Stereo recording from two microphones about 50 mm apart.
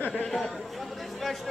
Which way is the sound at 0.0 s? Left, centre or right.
Left.